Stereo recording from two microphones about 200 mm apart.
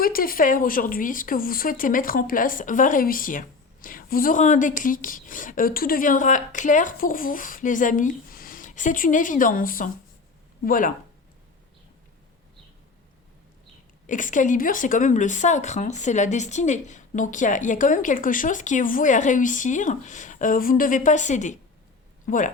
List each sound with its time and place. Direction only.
0.0 s speech: 45° left (ahead or behind)
14.1 s speech: 40° left (ahead or behind)